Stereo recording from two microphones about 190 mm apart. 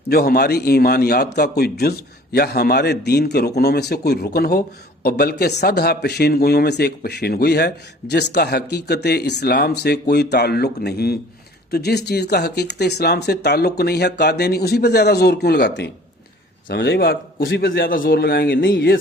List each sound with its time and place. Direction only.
0.1 s a man's voice: 55° left (ahead or behind)